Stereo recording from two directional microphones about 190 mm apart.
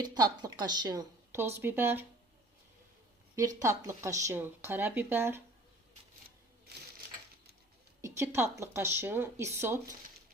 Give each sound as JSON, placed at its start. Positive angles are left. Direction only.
{"t": 0.0, "sound": "a woman's voice", "side_deg": -20}
{"t": 3.6, "sound": "speech", "side_deg": -15}
{"t": 8.0, "sound": "speech", "side_deg": -15}